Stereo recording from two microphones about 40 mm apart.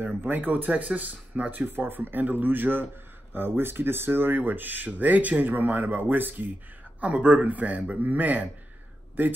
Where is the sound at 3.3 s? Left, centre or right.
Right.